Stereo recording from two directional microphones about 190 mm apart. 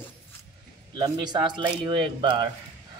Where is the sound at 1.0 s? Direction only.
25° right (ahead or behind).